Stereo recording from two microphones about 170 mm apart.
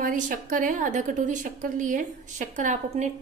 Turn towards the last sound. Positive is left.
turn(degrees=-45)  # may be behind; listen again after turning